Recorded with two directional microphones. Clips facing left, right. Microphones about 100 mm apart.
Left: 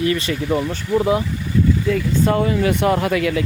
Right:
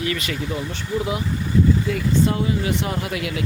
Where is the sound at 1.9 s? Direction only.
50° left (ahead or behind).